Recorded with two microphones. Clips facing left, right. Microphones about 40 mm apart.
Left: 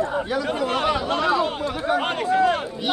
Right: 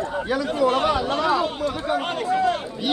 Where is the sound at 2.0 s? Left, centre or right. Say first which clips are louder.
Left 3 dB; left.